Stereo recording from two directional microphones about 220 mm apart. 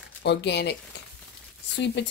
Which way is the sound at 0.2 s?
50° left (ahead or behind).